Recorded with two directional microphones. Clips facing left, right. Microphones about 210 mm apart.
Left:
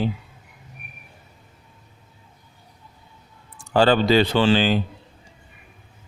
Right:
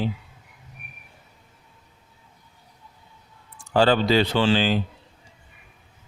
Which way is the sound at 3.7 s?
55° left (ahead or behind).